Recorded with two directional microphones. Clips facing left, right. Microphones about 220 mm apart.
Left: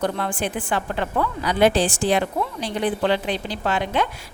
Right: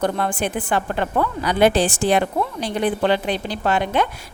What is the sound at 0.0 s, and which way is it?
A woman's voice, 55° right (ahead or behind).